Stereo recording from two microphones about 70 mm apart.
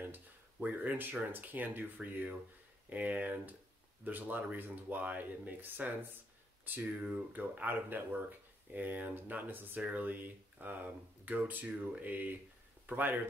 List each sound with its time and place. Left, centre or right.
0.0 s a sound: right
1.3 s speech: right
7.2 s speech: right